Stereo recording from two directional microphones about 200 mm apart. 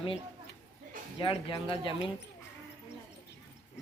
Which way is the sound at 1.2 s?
25° left (ahead or behind).